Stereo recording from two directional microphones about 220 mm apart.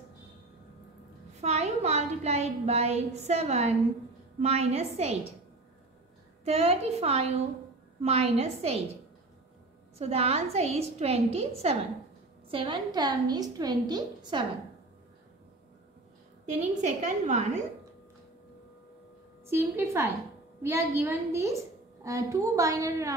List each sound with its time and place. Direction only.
1.4 s a woman's voice: 30° right (ahead or behind)
6.4 s a woman's voice: 30° right (ahead or behind)
9.9 s a woman's voice: 30° right (ahead or behind)
16.4 s a woman's voice: 30° right (ahead or behind)
19.4 s a woman's voice: 10° right (ahead or behind)